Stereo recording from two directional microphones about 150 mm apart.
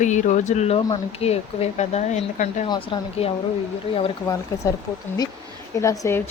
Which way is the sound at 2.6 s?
35° left (ahead or behind).